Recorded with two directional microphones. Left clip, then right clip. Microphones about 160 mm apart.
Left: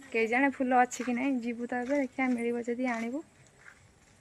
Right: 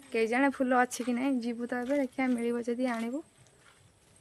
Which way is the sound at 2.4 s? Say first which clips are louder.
Right 1 dB; 20° right (ahead or behind).